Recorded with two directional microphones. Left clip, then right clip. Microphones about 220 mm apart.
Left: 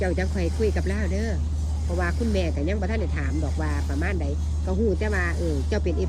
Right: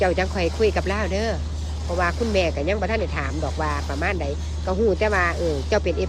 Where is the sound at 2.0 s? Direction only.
5° right (ahead or behind).